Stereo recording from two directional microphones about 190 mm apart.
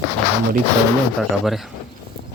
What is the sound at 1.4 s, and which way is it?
Speech, centre (ahead or behind).